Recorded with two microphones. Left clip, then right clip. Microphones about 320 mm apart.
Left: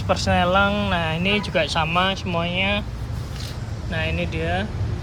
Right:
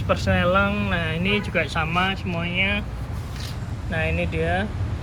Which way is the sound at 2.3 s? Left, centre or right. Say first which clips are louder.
Left 1 dB; centre.